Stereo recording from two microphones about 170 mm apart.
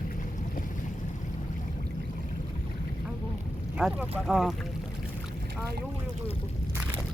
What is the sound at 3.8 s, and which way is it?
Speech, 5° right (ahead or behind).